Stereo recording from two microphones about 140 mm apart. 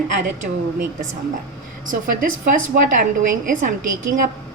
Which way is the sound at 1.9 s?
75° right (ahead or behind).